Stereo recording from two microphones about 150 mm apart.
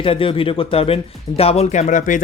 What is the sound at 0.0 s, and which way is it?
Speech, 35° left (ahead or behind).